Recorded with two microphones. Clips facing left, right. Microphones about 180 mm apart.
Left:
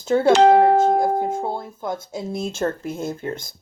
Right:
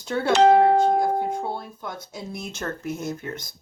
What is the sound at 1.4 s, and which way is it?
Speech, 25° left (ahead or behind).